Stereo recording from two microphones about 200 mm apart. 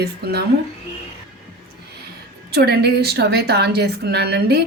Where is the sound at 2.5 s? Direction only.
55° right (ahead or behind).